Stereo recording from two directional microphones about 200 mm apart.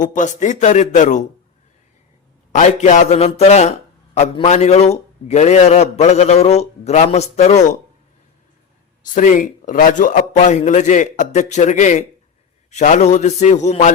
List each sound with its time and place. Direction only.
0.0 s a man's voice: 40° left (ahead or behind)
2.6 s a man's voice: 35° left (ahead or behind)
9.1 s a man's voice: 40° left (ahead or behind)